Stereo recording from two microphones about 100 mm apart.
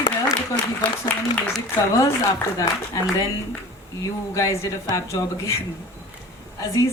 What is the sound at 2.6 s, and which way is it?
Speech, 35° left (ahead or behind).